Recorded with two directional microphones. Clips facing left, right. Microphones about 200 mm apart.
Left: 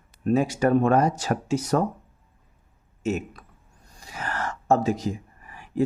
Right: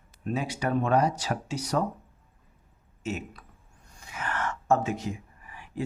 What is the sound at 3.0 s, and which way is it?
Speech, 45° left (ahead or behind).